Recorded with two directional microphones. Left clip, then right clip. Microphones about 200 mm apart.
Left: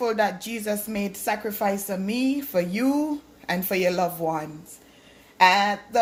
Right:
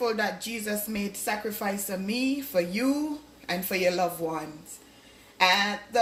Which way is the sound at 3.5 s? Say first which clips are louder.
Left 3 dB; 55° left (ahead or behind).